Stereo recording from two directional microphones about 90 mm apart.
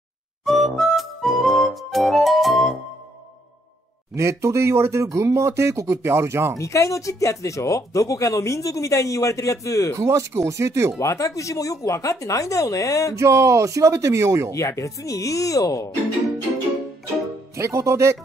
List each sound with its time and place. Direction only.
0.5 s music: centre (ahead or behind)
4.1 s speech: 35° right (ahead or behind)
6.6 s speech: 35° left (ahead or behind)
9.9 s speech: 35° right (ahead or behind)
11.0 s speech: 35° left (ahead or behind)
13.2 s speech: 35° right (ahead or behind)
14.5 s speech: 35° left (ahead or behind)
17.6 s speech: 30° right (ahead or behind)